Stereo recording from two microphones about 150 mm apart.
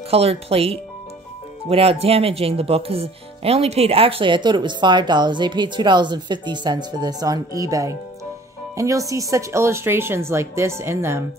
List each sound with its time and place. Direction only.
0.1 s speech: 40° right (ahead or behind); by 11.2 s 15° right (ahead or behind)